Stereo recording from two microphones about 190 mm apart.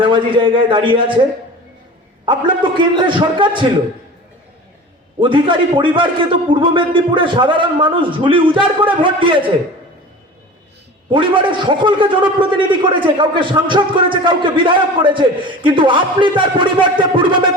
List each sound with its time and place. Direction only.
0.0 s a man's voice: 25° right (ahead or behind)
2.2 s a man's voice: 25° right (ahead or behind)
5.2 s a man's voice: 25° right (ahead or behind)
11.1 s a man's voice: 25° right (ahead or behind)